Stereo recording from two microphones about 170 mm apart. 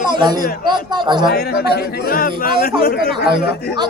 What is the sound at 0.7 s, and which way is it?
Speech, 25° right (ahead or behind).